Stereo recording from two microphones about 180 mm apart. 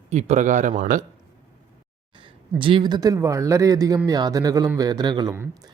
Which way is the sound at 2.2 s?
30° right (ahead or behind).